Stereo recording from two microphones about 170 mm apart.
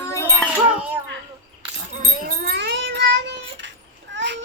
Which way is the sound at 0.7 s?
5° right (ahead or behind).